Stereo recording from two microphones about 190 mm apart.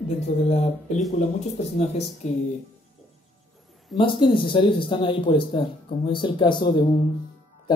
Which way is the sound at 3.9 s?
25° left (ahead or behind).